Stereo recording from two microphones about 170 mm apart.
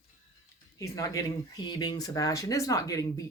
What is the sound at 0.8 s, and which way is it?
Speech, 20° left (ahead or behind).